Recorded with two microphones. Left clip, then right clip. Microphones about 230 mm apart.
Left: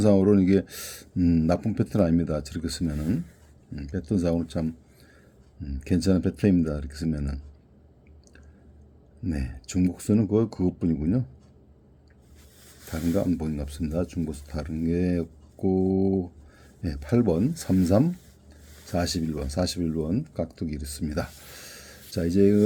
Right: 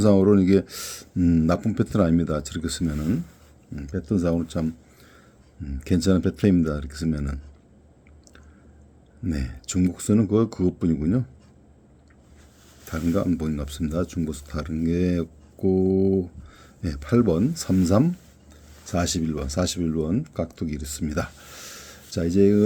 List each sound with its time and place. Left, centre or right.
0.0 s speech: centre
9.2 s speech: centre
12.9 s speech: centre